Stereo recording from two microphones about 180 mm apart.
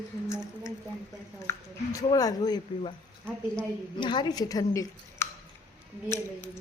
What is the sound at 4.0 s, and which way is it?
Speech, 25° left (ahead or behind).